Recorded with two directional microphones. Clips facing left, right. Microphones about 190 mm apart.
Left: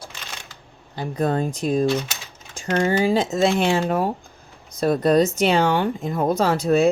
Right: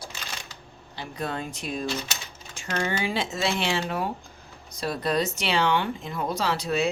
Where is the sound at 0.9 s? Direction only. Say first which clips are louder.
Left 9 dB; 45° left (ahead or behind).